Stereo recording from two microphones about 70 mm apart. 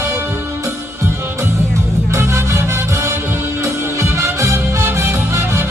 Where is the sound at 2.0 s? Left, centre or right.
Right.